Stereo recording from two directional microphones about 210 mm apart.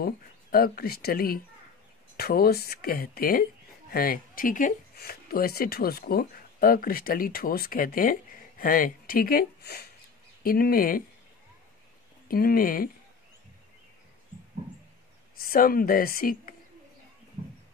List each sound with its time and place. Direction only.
0.0 s speech: 45° left (ahead or behind)
12.3 s speech: 45° left (ahead or behind)
15.3 s a woman's voice: 45° left (ahead or behind)